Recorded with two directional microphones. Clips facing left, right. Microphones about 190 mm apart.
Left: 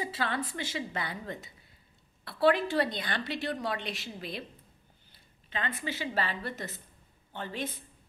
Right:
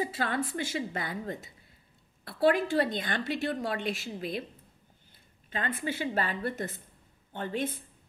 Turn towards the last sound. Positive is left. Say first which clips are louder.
# right 4 dB
turn(degrees=-50)  # may be behind; listen again after turning